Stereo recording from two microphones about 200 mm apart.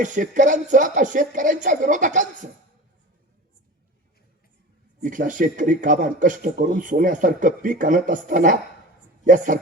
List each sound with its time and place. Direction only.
0.0 s a man's voice: 40° right (ahead or behind)
4.9 s a man's voice: 40° right (ahead or behind)